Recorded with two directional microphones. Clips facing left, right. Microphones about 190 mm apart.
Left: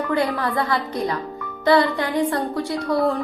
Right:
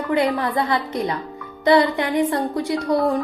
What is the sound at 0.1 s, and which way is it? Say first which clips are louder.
Speech: right 4 dB; 20° right (ahead or behind).